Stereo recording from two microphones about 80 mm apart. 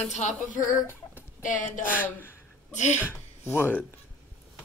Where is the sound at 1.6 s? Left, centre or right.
Left.